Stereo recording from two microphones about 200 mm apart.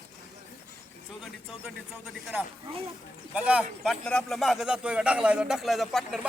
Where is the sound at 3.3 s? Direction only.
5° right (ahead or behind).